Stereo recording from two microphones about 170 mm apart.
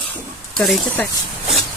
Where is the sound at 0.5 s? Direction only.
5° left (ahead or behind).